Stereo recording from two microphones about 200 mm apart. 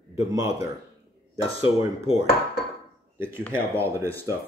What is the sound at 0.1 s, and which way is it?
Speech, 15° right (ahead or behind).